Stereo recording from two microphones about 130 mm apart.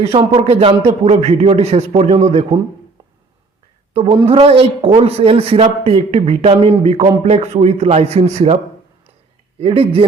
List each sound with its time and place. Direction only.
0.0 s speech: 50° right (ahead or behind)
3.9 s a woman's voice: 50° right (ahead or behind)
9.6 s speech: 45° right (ahead or behind)